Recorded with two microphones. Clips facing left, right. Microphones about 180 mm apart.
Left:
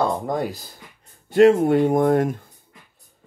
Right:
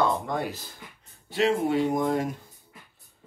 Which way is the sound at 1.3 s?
50° left (ahead or behind).